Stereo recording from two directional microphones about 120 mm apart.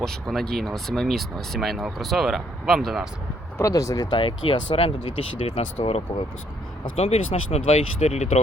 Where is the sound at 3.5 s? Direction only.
30° left (ahead or behind).